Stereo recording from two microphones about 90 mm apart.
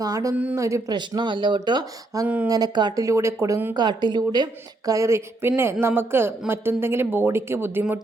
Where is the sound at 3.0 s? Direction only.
35° right (ahead or behind).